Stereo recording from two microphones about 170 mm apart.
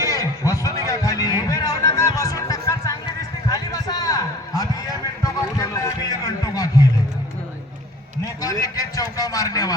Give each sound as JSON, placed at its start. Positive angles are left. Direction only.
{"t": 0.0, "sound": "music", "side_deg": 20}
{"t": 3.5, "sound": "a sound", "side_deg": 20}
{"t": 8.4, "sound": "a man's voice", "side_deg": 20}